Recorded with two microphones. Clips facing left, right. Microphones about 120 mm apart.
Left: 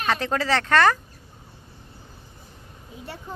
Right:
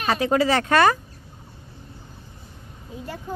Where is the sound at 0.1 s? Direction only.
10° right (ahead or behind).